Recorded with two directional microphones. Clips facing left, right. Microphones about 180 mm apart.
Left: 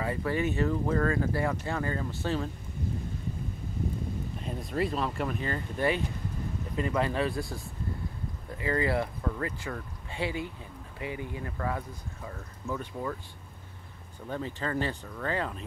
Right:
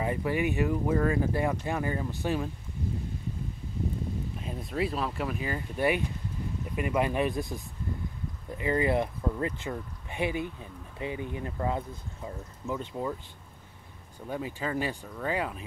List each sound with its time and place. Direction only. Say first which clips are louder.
0.0 s speech: right 1 dB; 15° right (ahead or behind)
4.4 s speech: left 1 dB; 5° right (ahead or behind)
14.2 s speech: right 1 dB; 10° right (ahead or behind)